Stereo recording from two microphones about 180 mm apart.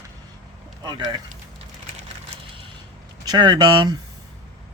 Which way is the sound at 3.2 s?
20° right (ahead or behind).